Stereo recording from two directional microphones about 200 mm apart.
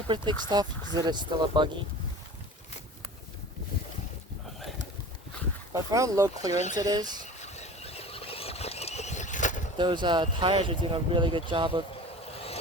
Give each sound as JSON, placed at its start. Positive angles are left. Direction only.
{"t": 0.1, "sound": "speech", "side_deg": -20}
{"t": 5.7, "sound": "speech", "side_deg": -15}
{"t": 7.4, "sound": "a sound", "side_deg": 35}
{"t": 9.7, "sound": "speech", "side_deg": -25}
{"t": 12.2, "sound": "boat", "side_deg": 30}